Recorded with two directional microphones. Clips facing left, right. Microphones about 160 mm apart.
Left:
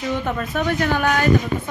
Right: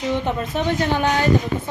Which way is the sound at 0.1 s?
20° right (ahead or behind).